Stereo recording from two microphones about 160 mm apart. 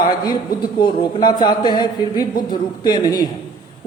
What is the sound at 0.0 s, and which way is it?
A man's voice, 25° left (ahead or behind).